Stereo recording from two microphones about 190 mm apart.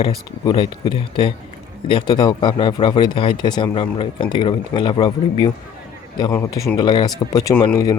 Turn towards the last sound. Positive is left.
turn(degrees=15)  # may be behind; listen again after turning